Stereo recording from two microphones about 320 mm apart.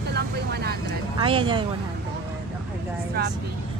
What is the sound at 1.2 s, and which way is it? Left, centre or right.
Speech, centre.